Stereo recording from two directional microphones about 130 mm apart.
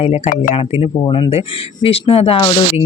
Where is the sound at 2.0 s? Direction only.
45° left (ahead or behind).